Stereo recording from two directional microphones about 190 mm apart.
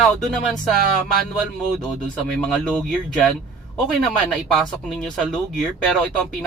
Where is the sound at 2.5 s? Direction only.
5° left (ahead or behind).